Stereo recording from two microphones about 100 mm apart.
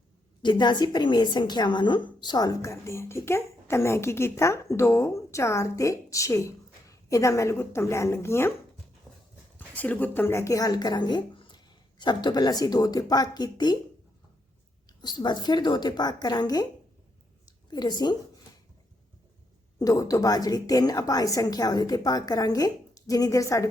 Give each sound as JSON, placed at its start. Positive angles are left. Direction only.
{"t": 0.4, "sound": "a woman's voice", "side_deg": 50}
{"t": 9.6, "sound": "a woman's voice", "side_deg": 15}
{"t": 14.8, "sound": "a woman's voice", "side_deg": 45}
{"t": 17.4, "sound": "a sound", "side_deg": 45}
{"t": 19.8, "sound": "a woman's voice", "side_deg": 35}